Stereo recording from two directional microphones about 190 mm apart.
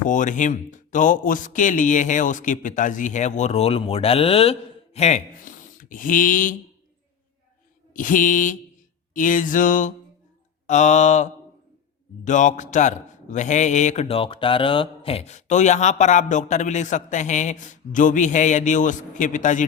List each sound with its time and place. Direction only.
0.0 s a man's voice: 40° left (ahead or behind)
7.9 s music: 45° left (ahead or behind)
10.7 s a man's voice: 40° left (ahead or behind)